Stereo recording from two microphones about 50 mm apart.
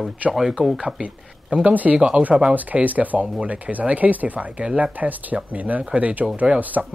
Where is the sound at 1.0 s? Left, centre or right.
Right.